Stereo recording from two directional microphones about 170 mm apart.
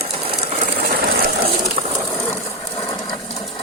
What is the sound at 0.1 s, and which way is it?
Ratchet, 35° right (ahead or behind).